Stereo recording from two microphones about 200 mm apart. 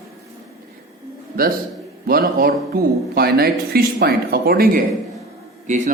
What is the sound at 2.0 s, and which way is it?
A man's voice, 45° right (ahead or behind).